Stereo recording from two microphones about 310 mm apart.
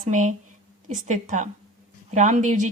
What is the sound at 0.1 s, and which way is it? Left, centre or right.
Speech, right.